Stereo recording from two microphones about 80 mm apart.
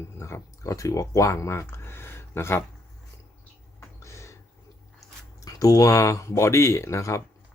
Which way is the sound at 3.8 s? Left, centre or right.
Left.